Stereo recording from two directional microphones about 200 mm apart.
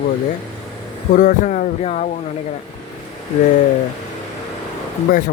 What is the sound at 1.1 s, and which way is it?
Speech, 40° left (ahead or behind).